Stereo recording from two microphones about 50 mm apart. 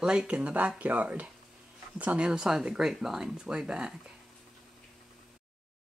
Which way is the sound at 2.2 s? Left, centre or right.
Centre.